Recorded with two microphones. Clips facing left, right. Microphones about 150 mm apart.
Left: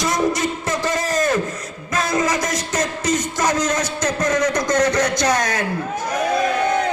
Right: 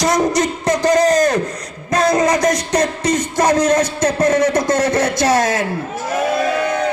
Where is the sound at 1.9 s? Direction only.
35° right (ahead or behind).